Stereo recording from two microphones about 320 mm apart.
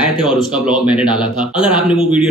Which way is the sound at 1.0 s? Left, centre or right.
Centre.